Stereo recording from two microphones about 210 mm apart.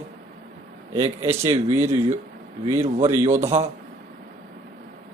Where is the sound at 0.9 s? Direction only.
15° right (ahead or behind).